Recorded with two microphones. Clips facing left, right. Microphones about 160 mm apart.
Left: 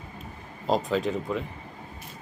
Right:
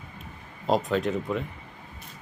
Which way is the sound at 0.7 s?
Centre (ahead or behind).